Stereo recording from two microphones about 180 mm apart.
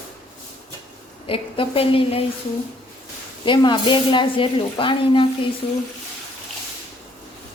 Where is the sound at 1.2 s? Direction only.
30° left (ahead or behind).